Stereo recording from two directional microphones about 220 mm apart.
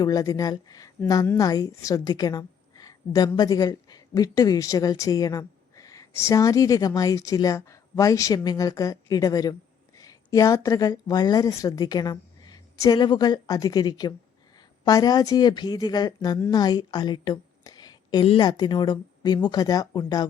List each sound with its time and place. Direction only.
0.0 s a woman's voice: 15° left (ahead or behind)